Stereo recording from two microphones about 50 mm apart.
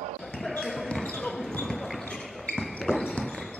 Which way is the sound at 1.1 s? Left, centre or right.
Centre.